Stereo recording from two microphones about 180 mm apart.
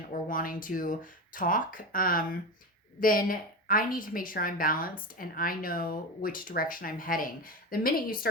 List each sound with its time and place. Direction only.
0.1 s a woman's voice: 50° left (ahead or behind)